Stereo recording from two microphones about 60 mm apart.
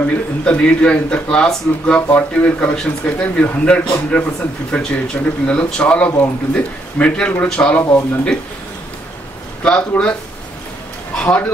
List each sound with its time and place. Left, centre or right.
0.0 s speech: centre
9.6 s speech: centre
11.2 s speech: left